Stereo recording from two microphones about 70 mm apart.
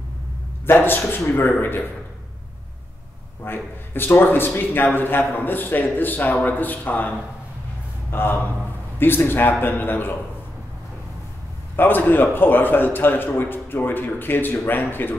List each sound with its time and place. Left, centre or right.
0.7 s a man's voice: left
3.4 s a man's voice: left
11.7 s a man's voice: left